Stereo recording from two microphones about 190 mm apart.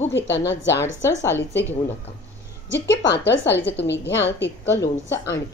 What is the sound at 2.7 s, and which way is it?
A woman's voice, 65° left (ahead or behind).